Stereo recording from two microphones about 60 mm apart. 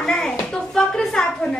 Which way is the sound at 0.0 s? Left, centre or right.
Centre.